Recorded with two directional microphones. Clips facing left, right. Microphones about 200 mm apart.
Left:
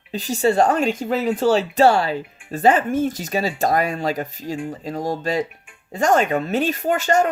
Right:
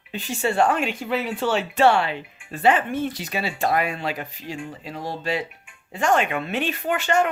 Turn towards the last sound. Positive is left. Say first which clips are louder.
# left 3 dB
turn(degrees=40)  # may be behind; listen again after turning